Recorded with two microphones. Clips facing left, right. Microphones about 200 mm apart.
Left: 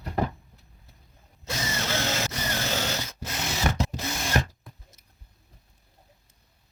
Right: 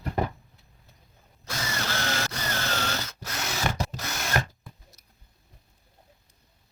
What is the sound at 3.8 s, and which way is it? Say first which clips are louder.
Rub: left 3 dB; 20° left (ahead or behind).